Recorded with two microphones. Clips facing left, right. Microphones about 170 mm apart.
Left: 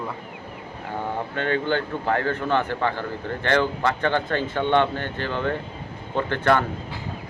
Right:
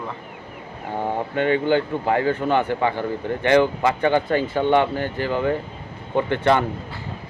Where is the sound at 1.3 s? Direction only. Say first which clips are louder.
Right 5 dB; 10° right (ahead or behind).